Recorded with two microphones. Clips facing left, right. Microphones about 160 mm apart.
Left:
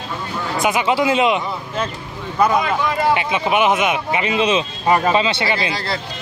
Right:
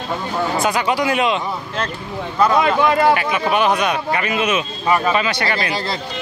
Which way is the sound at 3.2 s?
20° left (ahead or behind).